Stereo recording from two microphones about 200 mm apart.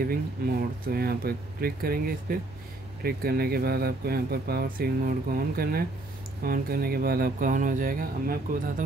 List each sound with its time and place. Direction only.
0.0 s speech: 45° right (ahead or behind)